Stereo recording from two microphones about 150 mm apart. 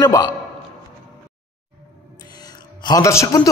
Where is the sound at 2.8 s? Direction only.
20° left (ahead or behind).